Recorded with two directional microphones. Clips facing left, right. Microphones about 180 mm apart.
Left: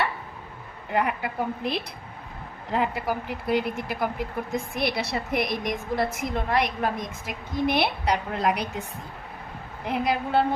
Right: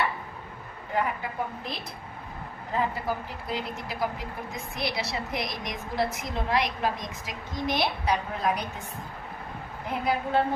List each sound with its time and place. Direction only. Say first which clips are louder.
0.9 s a woman's voice: left 3 dB; 70° left (ahead or behind)
9.8 s a woman's voice: left 2 dB; 75° left (ahead or behind)